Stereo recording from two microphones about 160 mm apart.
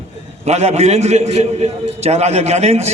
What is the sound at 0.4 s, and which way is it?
A man's voice, 45° right (ahead or behind).